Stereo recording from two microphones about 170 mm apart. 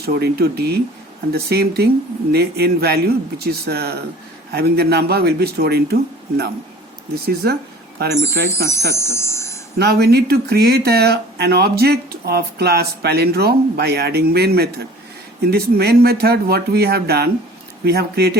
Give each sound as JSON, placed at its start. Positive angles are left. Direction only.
{"t": 0.0, "sound": "speech", "side_deg": -70}
{"t": 8.3, "sound": "speech", "side_deg": 15}
{"t": 8.9, "sound": "a sound", "side_deg": 15}
{"t": 9.7, "sound": "speech", "side_deg": -70}